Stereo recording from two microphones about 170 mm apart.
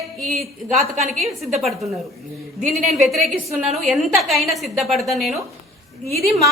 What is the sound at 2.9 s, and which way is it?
A woman's voice, centre (ahead or behind).